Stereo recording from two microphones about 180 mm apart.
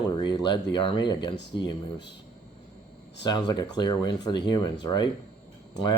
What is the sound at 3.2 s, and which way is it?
Speech, 25° left (ahead or behind).